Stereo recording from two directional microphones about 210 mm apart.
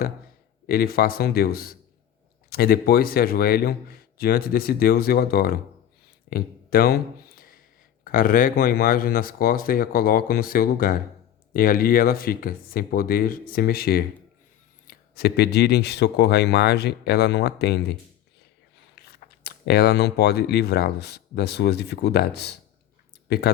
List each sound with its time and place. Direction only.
0.7 s speech: 45° left (ahead or behind)
6.3 s a sound: 45° left (ahead or behind)
8.0 s speech: 40° left (ahead or behind)
19.0 s speech: 50° left (ahead or behind)